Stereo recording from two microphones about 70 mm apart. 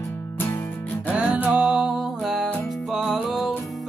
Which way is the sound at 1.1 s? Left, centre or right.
Centre.